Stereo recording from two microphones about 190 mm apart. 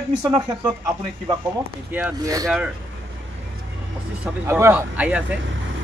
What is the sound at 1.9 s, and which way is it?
Speech, 10° right (ahead or behind).